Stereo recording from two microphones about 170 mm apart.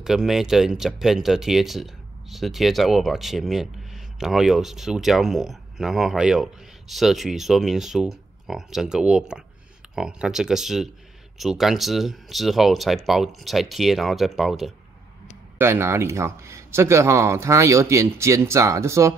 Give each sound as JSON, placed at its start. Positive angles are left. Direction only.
{"t": 0.0, "sound": "speech", "side_deg": 0}
{"t": 15.5, "sound": "a man's voice", "side_deg": -15}